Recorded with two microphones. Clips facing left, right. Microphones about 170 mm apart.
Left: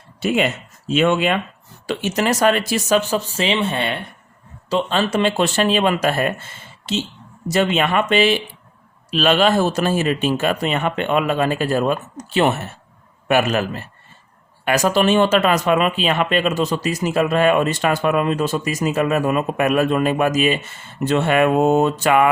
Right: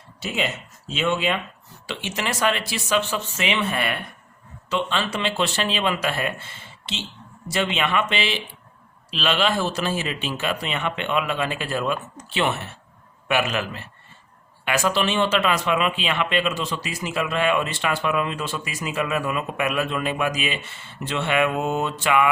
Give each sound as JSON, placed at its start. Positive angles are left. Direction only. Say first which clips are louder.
{"t": 0.2, "sound": "speech", "louder": "left 8 dB", "side_deg": 55}
{"t": 1.9, "sound": "speech", "louder": "left 9 dB", "side_deg": 45}
{"t": 4.7, "sound": "speech", "louder": "left 6 dB", "side_deg": 45}